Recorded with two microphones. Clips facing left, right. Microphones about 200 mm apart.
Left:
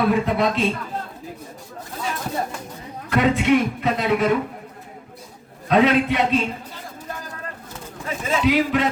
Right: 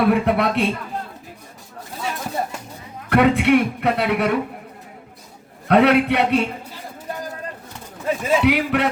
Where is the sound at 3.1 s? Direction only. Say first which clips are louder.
Right 2 dB; 65° right (ahead or behind).